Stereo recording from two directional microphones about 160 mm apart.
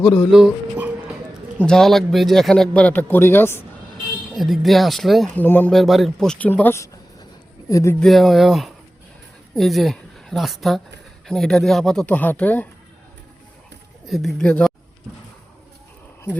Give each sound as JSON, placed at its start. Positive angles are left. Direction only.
{"t": 0.3, "sound": "a sound", "side_deg": 0}
{"t": 1.5, "sound": "speech", "side_deg": 5}
{"t": 4.4, "sound": "speech", "side_deg": 0}
{"t": 5.4, "sound": "speech", "side_deg": 10}
{"t": 5.7, "sound": "speech", "side_deg": 0}
{"t": 7.9, "sound": "a woman's voice", "side_deg": 0}
{"t": 14.1, "sound": "speech", "side_deg": 0}